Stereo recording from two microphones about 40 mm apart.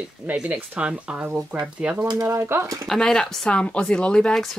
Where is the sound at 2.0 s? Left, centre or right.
Right.